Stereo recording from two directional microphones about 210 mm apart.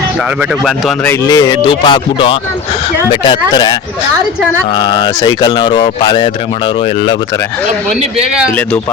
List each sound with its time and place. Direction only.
0.6 s a man's voice: centre (ahead or behind)
1.3 s speech: 20° left (ahead or behind)